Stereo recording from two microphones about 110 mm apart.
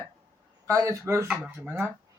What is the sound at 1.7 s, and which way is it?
Speech, 20° right (ahead or behind).